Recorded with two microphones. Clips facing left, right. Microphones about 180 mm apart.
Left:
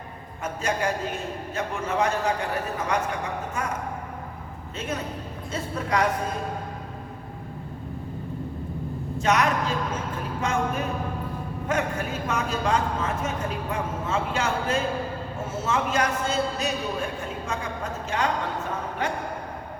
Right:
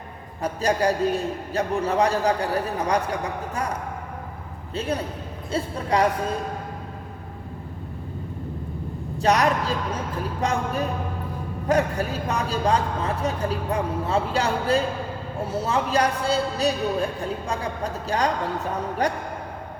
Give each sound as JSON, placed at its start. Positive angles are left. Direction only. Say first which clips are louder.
{"t": 0.4, "sound": "a man's voice", "louder": "right 5 dB", "side_deg": -35}
{"t": 4.7, "sound": "a man's voice", "louder": "right 4 dB", "side_deg": -35}
{"t": 9.1, "sound": "a man's voice", "louder": "right 3 dB", "side_deg": -35}
{"t": 11.7, "sound": "a man's voice", "louder": "right 5 dB", "side_deg": -35}